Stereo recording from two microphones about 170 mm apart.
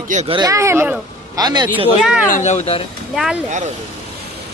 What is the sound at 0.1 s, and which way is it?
Speech, 45° right (ahead or behind).